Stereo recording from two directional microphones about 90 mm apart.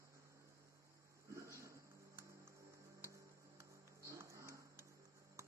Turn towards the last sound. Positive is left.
turn(degrees=-35)  # may be behind; listen again after turning